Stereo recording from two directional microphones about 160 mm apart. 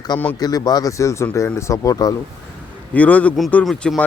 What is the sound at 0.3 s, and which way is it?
Speech, 25° left (ahead or behind).